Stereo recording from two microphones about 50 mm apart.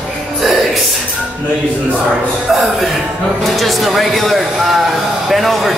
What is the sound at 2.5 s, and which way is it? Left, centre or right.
Speech, centre.